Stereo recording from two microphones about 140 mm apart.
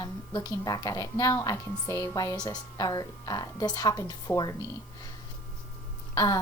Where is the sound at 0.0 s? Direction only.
30° left (ahead or behind).